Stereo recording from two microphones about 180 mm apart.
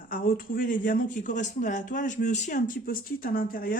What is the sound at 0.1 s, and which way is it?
Speech, 50° left (ahead or behind).